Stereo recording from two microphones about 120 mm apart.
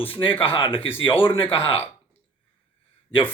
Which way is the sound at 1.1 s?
15° left (ahead or behind).